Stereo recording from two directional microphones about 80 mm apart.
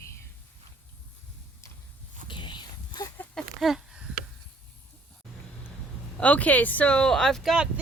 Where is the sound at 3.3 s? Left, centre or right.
Centre.